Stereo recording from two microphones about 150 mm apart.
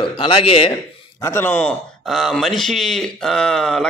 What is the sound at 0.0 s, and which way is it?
Speech, 35° left (ahead or behind).